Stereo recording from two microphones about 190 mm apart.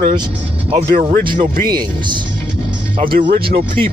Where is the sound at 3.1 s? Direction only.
45° right (ahead or behind).